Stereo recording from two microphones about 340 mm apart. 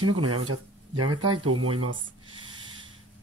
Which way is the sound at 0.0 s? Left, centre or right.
Right.